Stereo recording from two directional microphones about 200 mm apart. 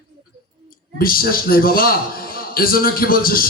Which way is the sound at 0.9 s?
45° left (ahead or behind).